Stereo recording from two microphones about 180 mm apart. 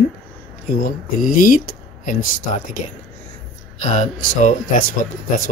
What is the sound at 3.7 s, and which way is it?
Speech, 40° left (ahead or behind).